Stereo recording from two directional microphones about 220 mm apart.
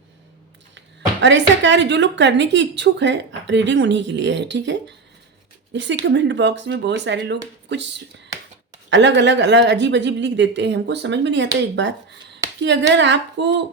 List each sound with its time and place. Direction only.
1.2 s a woman's voice: 55° right (ahead or behind)